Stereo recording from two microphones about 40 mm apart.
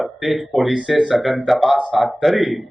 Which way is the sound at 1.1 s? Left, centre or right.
Centre.